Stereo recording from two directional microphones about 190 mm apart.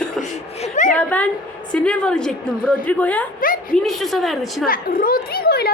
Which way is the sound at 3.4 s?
45° left (ahead or behind).